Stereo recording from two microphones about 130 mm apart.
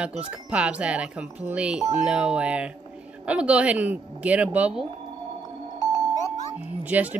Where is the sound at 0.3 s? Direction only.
10° right (ahead or behind).